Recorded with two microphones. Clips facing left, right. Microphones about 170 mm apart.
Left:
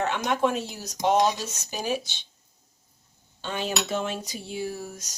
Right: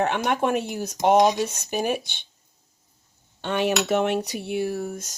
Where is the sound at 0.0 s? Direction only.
55° right (ahead or behind).